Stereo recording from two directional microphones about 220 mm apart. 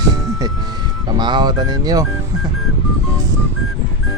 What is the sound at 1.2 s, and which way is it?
Speech, 20° right (ahead or behind).